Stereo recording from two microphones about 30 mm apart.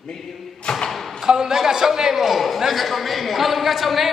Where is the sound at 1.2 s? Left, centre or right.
Centre.